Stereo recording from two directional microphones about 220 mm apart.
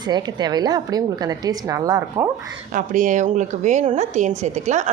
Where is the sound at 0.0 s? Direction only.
20° right (ahead or behind).